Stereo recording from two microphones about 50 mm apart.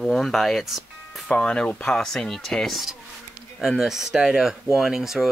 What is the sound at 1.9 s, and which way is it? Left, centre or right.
Speech, centre.